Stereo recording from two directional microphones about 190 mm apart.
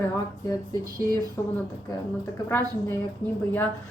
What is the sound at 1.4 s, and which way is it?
Speech, 15° left (ahead or behind).